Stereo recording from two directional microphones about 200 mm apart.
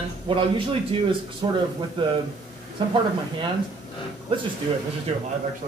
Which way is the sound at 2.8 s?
25° right (ahead or behind).